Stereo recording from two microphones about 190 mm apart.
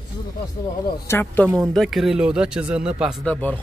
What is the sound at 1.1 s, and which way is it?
Speech, 10° left (ahead or behind).